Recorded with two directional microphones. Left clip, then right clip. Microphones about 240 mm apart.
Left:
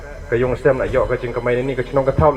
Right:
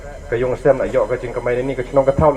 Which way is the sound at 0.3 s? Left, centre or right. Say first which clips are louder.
Right 1 dB; left.